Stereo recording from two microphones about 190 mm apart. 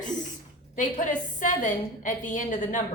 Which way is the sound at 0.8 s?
40° left (ahead or behind).